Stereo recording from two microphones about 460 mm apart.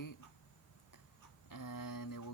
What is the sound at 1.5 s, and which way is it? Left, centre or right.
Speech, left.